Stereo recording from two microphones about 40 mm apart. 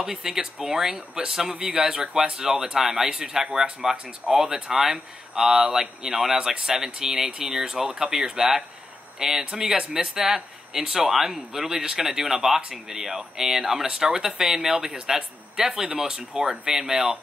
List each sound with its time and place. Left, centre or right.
0.0 s speech: centre